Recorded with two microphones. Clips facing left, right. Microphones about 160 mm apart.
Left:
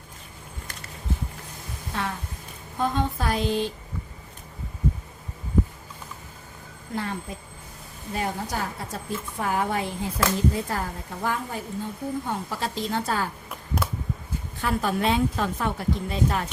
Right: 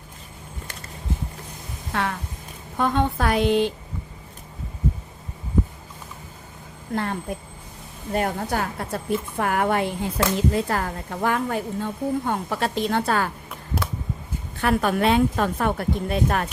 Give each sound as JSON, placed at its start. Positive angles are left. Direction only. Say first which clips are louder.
{"t": 1.9, "sound": "a sound", "louder": "right 4 dB", "side_deg": -70}
{"t": 2.7, "sound": "a woman's voice", "louder": "right 4 dB", "side_deg": -65}
{"t": 6.9, "sound": "a woman's voice", "louder": "right 4 dB", "side_deg": -60}
{"t": 14.6, "sound": "a woman's voice", "louder": "right 4 dB", "side_deg": -65}